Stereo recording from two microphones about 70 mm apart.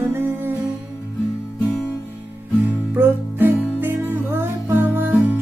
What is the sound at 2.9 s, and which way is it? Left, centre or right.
Music, right.